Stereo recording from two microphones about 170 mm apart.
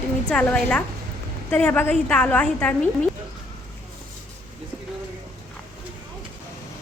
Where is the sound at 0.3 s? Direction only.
5° left (ahead or behind).